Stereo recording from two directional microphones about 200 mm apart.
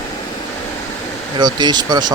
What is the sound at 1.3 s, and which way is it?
Speech, 20° right (ahead or behind).